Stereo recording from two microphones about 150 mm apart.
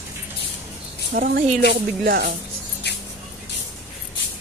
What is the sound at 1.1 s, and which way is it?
Speech, 70° right (ahead or behind).